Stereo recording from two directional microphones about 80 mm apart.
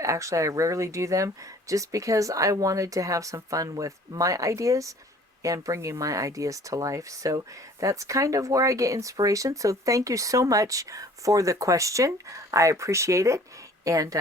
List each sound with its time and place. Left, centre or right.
0.0 s speech: right